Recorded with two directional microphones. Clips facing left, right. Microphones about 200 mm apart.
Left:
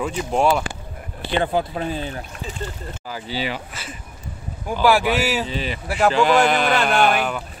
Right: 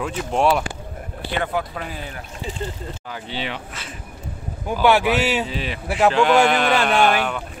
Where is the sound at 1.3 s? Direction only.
30° left (ahead or behind).